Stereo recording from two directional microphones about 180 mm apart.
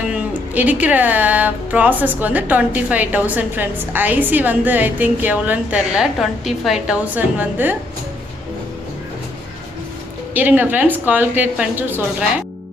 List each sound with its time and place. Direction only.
0.1 s speech: 10° right (ahead or behind)
10.3 s speech: 10° right (ahead or behind)